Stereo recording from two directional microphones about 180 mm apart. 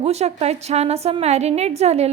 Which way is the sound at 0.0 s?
35° right (ahead or behind).